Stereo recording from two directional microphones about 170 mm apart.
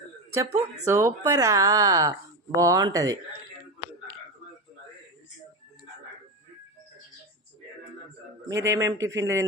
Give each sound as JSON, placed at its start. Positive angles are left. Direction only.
{"t": 0.3, "sound": "speech", "side_deg": -20}
{"t": 8.6, "sound": "speech", "side_deg": -20}